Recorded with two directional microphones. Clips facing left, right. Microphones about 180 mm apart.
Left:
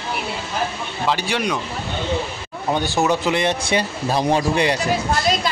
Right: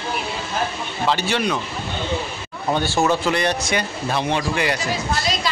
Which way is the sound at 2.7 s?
15° left (ahead or behind).